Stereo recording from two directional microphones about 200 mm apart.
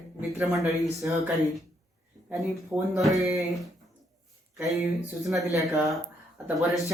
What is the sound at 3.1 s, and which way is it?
Speech, 15° right (ahead or behind).